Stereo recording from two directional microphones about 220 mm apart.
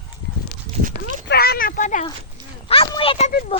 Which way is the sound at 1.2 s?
45° left (ahead or behind).